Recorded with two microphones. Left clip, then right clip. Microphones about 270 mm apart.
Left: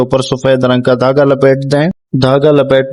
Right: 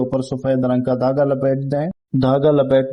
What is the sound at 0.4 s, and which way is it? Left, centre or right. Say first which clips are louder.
A man's voice: left 8 dB; left.